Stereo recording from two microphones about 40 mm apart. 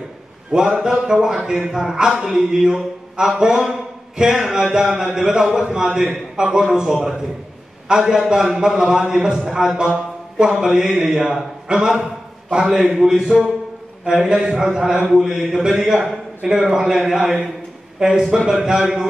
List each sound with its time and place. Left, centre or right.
0.5 s a man's voice: centre